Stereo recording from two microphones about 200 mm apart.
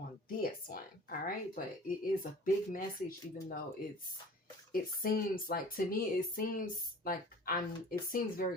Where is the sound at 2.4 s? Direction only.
40° left (ahead or behind).